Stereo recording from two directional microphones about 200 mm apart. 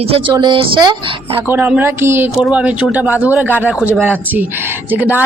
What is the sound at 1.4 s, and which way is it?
Speech, 10° right (ahead or behind).